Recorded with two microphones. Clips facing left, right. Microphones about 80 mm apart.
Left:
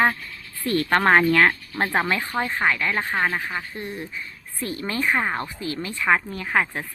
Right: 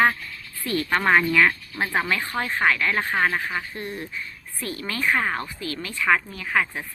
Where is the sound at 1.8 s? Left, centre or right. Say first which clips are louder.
Left 2 dB; left.